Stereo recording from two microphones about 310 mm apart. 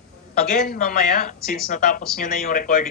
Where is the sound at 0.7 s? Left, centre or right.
Left.